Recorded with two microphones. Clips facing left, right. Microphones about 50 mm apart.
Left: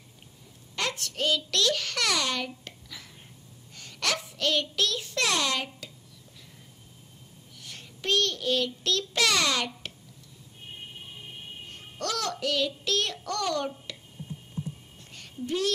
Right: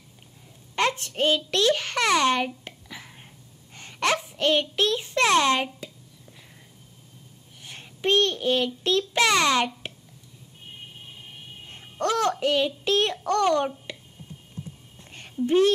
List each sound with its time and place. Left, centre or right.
0.7 s a child's voice: right
7.6 s child singing: right
11.7 s a child's voice: right
15.0 s a sound: right